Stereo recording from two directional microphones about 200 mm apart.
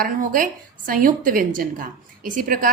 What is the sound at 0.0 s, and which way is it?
A woman's voice, 45° right (ahead or behind).